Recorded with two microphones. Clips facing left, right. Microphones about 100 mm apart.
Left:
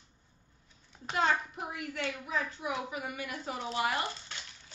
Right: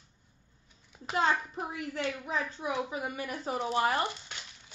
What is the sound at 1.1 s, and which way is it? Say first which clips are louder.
A woman's voice: right 1 dB; 30° right (ahead or behind).